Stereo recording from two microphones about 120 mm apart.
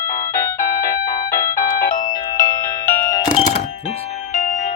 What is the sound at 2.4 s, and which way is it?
Music, 20° left (ahead or behind).